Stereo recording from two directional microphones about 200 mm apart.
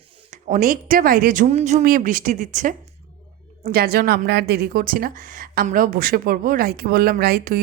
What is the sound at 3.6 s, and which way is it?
A woman's voice, 50° right (ahead or behind).